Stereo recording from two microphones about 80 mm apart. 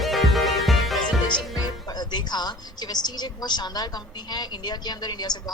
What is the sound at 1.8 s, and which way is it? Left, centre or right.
A woman's voice, left.